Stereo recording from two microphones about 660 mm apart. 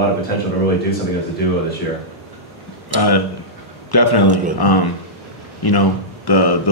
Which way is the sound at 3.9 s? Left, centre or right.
Left.